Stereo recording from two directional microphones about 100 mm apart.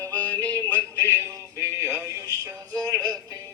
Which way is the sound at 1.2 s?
30° right (ahead or behind).